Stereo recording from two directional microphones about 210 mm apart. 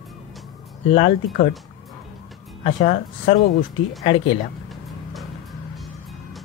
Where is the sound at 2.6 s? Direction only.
30° left (ahead or behind).